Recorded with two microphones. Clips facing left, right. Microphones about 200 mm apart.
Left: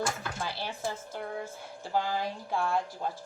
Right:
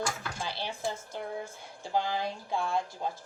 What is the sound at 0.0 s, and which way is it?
Dishes, 10° left (ahead or behind).